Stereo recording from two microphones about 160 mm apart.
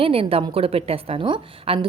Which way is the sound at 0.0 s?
35° right (ahead or behind).